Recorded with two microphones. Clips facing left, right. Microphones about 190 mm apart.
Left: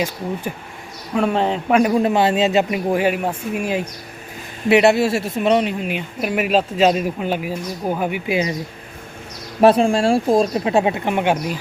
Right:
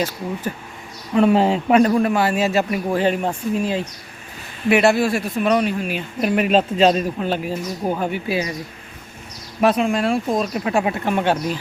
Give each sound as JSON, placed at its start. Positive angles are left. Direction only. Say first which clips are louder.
{"t": 1.1, "sound": "speech", "louder": "right 3 dB", "side_deg": 0}
{"t": 1.8, "sound": "speech", "louder": "left 1 dB", "side_deg": 20}
{"t": 6.1, "sound": "speech", "louder": "right 2 dB", "side_deg": 5}
{"t": 9.6, "sound": "speech", "louder": "left 4 dB", "side_deg": 30}